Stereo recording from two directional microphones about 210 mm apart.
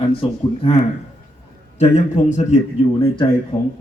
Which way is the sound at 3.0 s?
20° left (ahead or behind).